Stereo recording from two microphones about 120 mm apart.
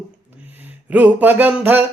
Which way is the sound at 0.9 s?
15° right (ahead or behind).